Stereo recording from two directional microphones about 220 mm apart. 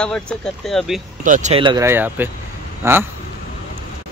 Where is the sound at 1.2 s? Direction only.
35° right (ahead or behind); by 3.1 s 10° right (ahead or behind).